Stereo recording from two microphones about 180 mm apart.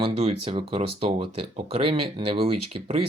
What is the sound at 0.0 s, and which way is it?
Speech, 30° right (ahead or behind).